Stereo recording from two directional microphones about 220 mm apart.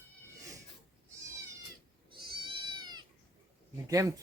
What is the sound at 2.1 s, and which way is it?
Goat, 20° right (ahead or behind).